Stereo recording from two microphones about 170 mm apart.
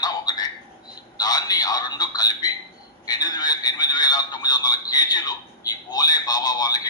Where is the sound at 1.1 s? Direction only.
25° left (ahead or behind).